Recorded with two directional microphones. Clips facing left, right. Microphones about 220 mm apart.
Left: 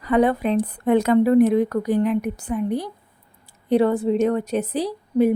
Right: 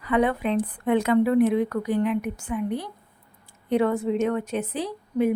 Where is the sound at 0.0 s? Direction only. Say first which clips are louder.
Left 4 dB; 40° left (ahead or behind).